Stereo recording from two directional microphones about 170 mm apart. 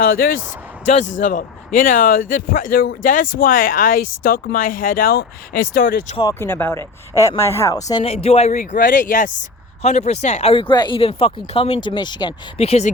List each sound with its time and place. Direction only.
0.0 s speech: 60° left (ahead or behind)
0.9 s speech: 45° left (ahead or behind); by 6.1 s 65° left (ahead or behind)
6.4 s speech: 15° left (ahead or behind)
8.0 s speech: 35° left (ahead or behind)